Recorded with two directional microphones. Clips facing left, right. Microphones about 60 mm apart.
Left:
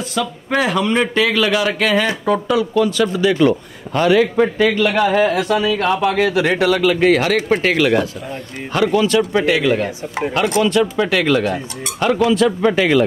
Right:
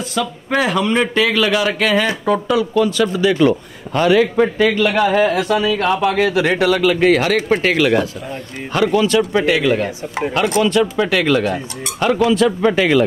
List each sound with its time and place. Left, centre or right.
0.1 s speech: right